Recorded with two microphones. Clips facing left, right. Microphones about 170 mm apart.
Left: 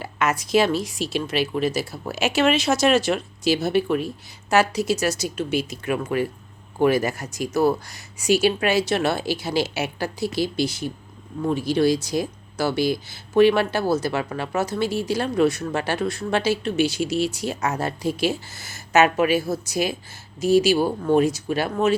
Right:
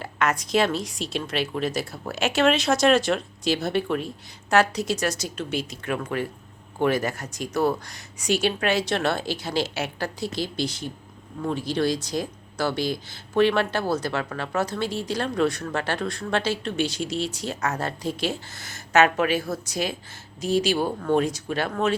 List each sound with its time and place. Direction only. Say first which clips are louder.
0.0 s speech: left 1 dB; 5° left (ahead or behind)